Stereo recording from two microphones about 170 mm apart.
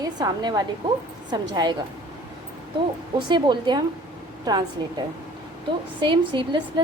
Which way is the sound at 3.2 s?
25° right (ahead or behind).